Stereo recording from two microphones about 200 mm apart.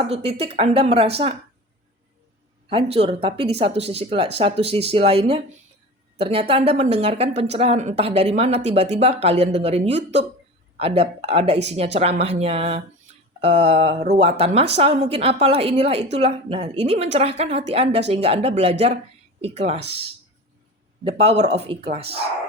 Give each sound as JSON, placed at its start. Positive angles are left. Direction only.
{"t": 0.1, "sound": "speech", "side_deg": -30}
{"t": 2.6, "sound": "a woman's voice", "side_deg": -30}
{"t": 21.0, "sound": "speech", "side_deg": -30}